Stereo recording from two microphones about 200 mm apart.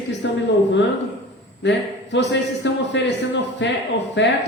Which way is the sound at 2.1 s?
60° left (ahead or behind).